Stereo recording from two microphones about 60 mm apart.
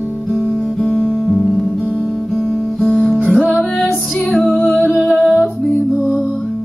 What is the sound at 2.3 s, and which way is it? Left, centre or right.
Guitar, centre.